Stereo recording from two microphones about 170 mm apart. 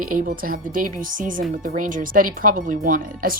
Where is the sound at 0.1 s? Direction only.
55° right (ahead or behind).